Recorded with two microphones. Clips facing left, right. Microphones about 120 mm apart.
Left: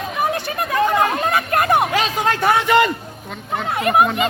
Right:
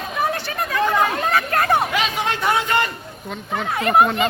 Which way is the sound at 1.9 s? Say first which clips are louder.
Left 3 dB; 40° left (ahead or behind).